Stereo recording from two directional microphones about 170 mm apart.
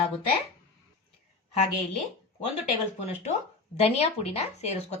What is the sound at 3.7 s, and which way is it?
A woman's voice, 35° left (ahead or behind).